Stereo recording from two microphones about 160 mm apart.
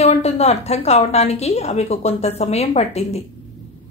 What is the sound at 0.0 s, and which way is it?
Speech, 40° left (ahead or behind).